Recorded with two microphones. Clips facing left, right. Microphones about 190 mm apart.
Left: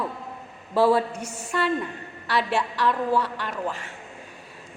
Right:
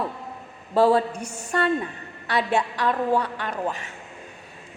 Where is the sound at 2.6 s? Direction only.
15° right (ahead or behind).